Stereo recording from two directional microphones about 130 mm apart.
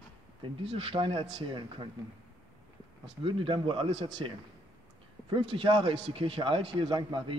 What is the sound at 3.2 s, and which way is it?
A man's voice, 45° right (ahead or behind).